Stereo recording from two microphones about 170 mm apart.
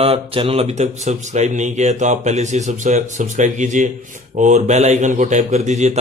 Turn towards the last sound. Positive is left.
turn(degrees=-45)  # may be behind; listen again after turning